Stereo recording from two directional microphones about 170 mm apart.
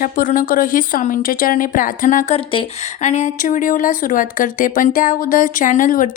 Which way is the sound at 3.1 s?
45° left (ahead or behind).